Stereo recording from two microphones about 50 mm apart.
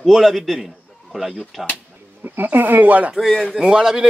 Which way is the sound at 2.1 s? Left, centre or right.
Right.